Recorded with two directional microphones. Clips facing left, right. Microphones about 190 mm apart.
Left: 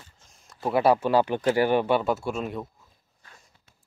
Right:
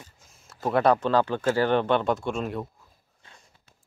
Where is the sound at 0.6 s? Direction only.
5° left (ahead or behind).